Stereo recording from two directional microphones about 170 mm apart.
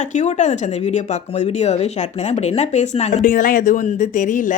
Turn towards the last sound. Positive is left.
turn(degrees=50)  # may be behind; listen again after turning